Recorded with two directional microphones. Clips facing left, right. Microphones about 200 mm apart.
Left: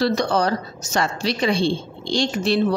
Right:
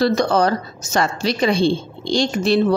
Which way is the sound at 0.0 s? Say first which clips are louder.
Right 3 dB; 50° right (ahead or behind).